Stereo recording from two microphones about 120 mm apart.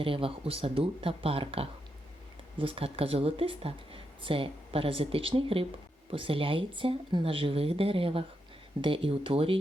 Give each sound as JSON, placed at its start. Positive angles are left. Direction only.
{"t": 0.0, "sound": "speech", "side_deg": -50}